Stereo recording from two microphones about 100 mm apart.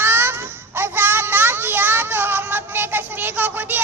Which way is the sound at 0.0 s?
25° right (ahead or behind).